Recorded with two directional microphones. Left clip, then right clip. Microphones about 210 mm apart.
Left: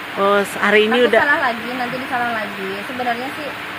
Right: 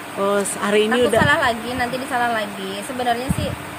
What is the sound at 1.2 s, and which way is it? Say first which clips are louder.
A woman's voice: left 1 dB; 30° right (ahead or behind).